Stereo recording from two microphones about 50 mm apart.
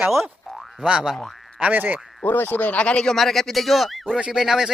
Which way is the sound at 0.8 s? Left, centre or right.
Right.